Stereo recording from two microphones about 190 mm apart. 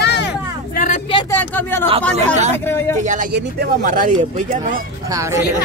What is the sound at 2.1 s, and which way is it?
Speech, 35° right (ahead or behind).